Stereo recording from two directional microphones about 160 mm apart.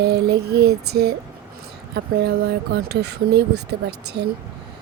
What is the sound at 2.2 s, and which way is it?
Speech, 85° right.